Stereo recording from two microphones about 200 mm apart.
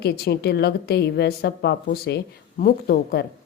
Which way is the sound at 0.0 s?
55° left (ahead or behind).